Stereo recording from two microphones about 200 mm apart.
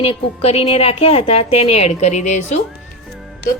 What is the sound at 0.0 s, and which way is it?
A woman's voice, 30° left (ahead or behind).